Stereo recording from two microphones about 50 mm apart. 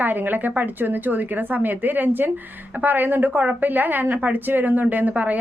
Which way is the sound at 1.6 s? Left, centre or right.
Right.